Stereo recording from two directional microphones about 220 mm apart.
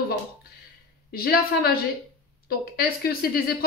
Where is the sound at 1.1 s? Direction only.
45° left (ahead or behind).